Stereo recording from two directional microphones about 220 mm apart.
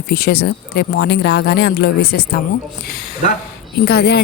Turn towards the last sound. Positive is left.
turn(degrees=45)  # may be behind; listen again after turning